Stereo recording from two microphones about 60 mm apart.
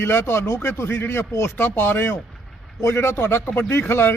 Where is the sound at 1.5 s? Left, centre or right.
Left.